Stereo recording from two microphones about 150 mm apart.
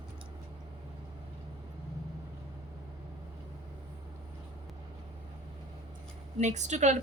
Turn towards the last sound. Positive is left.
turn(degrees=-50)  # may be behind; listen again after turning